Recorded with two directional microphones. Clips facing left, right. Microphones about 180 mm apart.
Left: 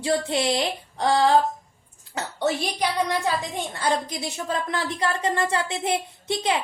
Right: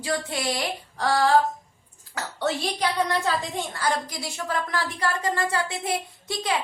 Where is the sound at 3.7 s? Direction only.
25° left (ahead or behind).